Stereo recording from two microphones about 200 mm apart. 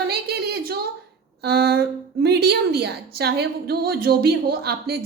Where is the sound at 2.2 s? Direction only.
55° right (ahead or behind).